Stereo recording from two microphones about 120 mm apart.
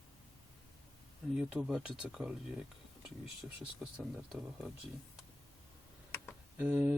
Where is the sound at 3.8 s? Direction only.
5° right (ahead or behind).